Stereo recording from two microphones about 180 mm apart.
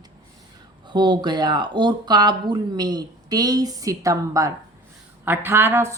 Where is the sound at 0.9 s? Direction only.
25° right (ahead or behind).